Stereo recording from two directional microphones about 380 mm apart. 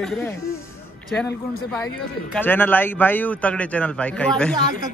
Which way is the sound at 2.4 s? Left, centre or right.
Centre.